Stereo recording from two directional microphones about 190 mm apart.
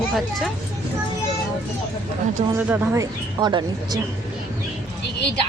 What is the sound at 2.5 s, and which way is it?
Speech, 10° right (ahead or behind).